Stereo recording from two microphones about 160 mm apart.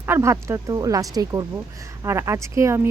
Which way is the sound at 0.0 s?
15° right (ahead or behind).